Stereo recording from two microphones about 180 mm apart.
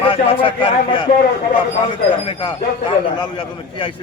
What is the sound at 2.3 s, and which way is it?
Speech, 25° left (ahead or behind).